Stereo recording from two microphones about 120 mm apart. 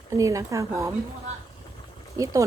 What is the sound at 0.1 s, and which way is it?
Speech, 25° right (ahead or behind).